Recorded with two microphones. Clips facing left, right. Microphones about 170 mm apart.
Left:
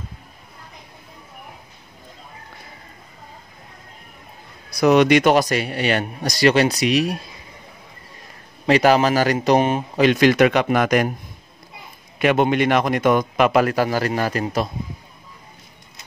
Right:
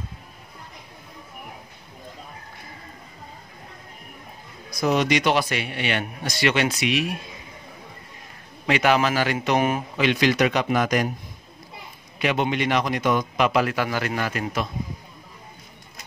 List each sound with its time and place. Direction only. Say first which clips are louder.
4.6 s speech: left 7 dB; 70° left (ahead or behind); by 7.2 s 40° left (ahead or behind)
8.6 s speech: left 5 dB; 35° left (ahead or behind)
9.9 s speech: left 7 dB; 45° left (ahead or behind); by 11.1 s 65° left (ahead or behind)
12.2 s a man's voice: left 6 dB; 50° left (ahead or behind); by 14.7 s 35° left (ahead or behind)